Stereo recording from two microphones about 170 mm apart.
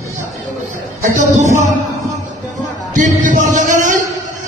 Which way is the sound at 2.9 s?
45° right (ahead or behind).